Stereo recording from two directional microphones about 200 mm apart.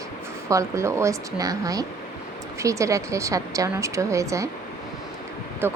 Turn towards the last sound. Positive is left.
turn(degrees=-10)  # may be behind; listen again after turning